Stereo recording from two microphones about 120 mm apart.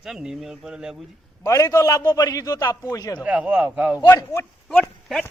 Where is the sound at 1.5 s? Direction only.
25° left (ahead or behind).